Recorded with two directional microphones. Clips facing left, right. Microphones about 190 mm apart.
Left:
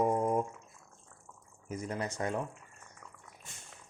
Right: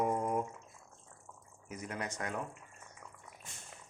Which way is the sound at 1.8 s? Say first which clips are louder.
Left 4 dB; 30° left (ahead or behind).